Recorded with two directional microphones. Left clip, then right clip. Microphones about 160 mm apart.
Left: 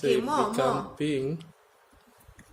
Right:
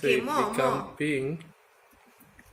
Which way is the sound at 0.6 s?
5° left (ahead or behind).